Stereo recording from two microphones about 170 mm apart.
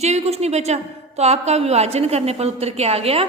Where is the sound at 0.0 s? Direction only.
40° right (ahead or behind).